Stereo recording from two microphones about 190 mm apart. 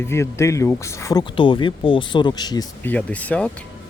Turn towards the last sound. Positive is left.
turn(degrees=5)  # may be behind; listen again after turning